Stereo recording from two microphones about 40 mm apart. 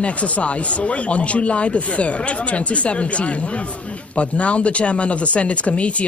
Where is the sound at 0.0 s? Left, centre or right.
Left.